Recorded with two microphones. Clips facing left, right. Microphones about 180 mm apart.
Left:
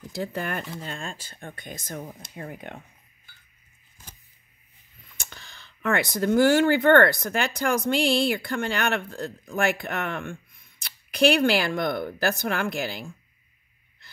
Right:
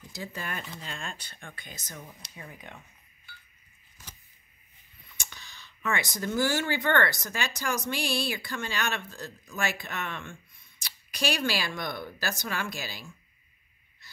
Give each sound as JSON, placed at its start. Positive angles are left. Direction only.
{"t": 0.1, "sound": "speech", "side_deg": 60}
{"t": 5.1, "sound": "speech", "side_deg": 55}